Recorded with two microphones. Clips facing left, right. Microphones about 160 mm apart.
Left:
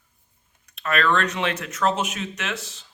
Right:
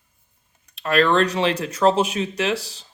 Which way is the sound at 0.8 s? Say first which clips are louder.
Right 5 dB; 30° right (ahead or behind).